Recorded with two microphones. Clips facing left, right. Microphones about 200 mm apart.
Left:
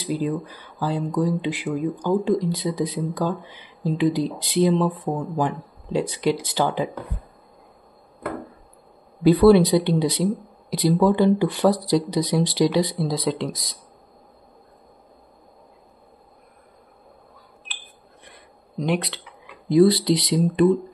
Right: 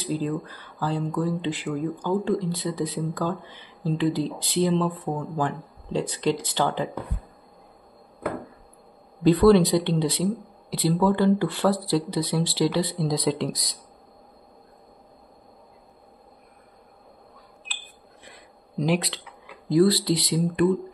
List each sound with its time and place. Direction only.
0.1 s speech: 15° left (ahead or behind)
9.2 s speech: 10° left (ahead or behind)
13.1 s speech: centre (ahead or behind)
18.2 s a sound: centre (ahead or behind)
19.7 s speech: 20° left (ahead or behind)